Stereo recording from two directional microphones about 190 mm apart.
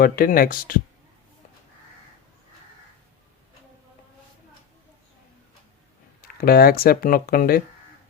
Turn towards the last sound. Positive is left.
turn(degrees=50)  # may be behind; listen again after turning